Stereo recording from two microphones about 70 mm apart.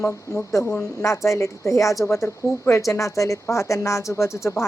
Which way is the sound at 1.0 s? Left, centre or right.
Left.